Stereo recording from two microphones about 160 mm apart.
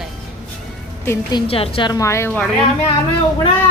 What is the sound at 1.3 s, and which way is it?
Speech, 35° left (ahead or behind).